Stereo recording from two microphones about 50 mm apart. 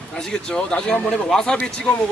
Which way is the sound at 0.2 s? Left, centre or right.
Centre.